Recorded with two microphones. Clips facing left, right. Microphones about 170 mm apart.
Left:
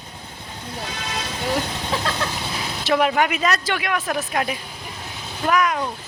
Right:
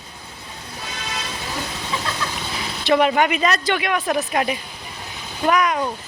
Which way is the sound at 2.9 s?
Centre (ahead or behind).